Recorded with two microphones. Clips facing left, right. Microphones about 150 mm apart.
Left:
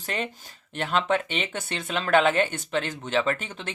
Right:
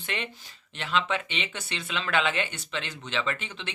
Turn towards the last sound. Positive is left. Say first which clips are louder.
# left 5 dB
turn(degrees=45)  # may be behind; listen again after turning